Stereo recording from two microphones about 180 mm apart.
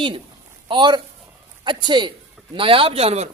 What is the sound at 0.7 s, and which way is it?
A man's voice, 25° right (ahead or behind).